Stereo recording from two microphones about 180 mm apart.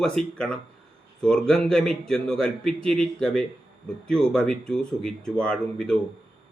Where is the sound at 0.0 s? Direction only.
5° left (ahead or behind).